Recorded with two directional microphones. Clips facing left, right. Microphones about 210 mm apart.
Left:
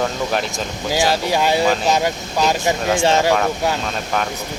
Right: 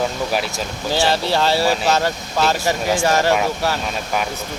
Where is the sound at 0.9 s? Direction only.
10° left (ahead or behind).